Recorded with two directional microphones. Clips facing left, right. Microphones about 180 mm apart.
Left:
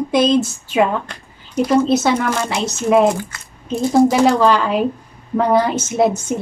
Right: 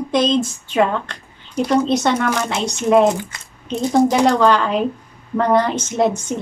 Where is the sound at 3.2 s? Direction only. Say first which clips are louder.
Left 2 dB; 20° right (ahead or behind).